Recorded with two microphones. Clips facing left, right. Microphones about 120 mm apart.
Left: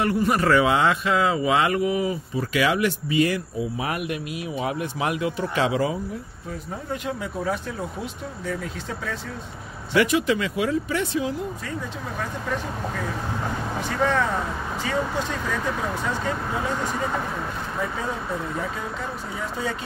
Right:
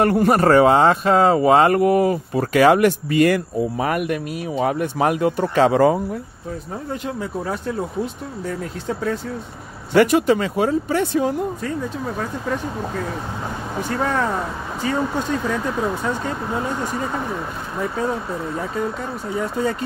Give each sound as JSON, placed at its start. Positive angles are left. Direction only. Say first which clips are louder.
{"t": 0.0, "sound": "speech", "louder": "right 6 dB", "side_deg": -50}
{"t": 9.9, "sound": "speech", "louder": "right 6 dB", "side_deg": -45}